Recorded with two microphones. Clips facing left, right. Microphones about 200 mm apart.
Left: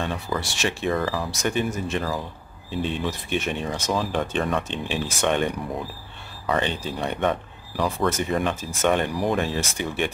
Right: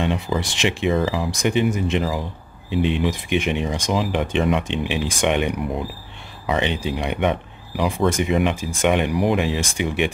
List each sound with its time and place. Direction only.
0.0 s speech: 20° right (ahead or behind)